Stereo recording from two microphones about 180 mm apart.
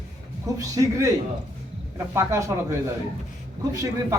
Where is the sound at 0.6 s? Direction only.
20° right (ahead or behind).